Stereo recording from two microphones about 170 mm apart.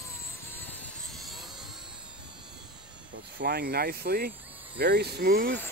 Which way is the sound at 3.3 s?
65° right (ahead or behind).